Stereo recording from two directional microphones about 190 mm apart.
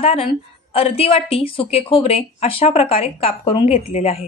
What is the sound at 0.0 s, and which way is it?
A woman's voice, 30° left (ahead or behind).